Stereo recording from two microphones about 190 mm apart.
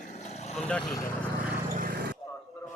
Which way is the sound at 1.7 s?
50° right (ahead or behind).